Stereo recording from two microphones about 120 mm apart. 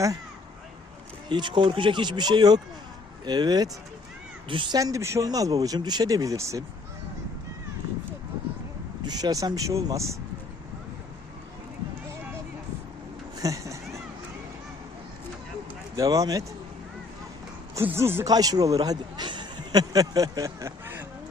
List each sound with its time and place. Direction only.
1.3 s speech: 40° right (ahead or behind)
4.8 s speech: 25° right (ahead or behind)
9.0 s speech: 35° right (ahead or behind)
13.4 s a sound: 30° right (ahead or behind)
16.0 s speech: 30° right (ahead or behind)
17.8 s speech: 20° right (ahead or behind)
18.3 s a man's voice: 30° right (ahead or behind)